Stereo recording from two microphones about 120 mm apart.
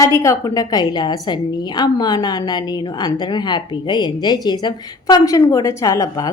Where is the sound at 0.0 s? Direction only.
25° left (ahead or behind).